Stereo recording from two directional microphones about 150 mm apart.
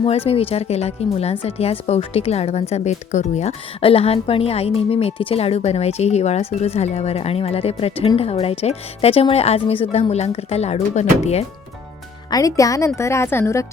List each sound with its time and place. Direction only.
0.3 s speech: 40° left (ahead or behind)
12.3 s speech: 20° left (ahead or behind)